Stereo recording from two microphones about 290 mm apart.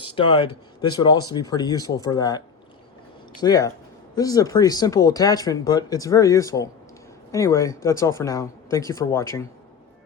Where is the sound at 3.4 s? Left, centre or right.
Centre.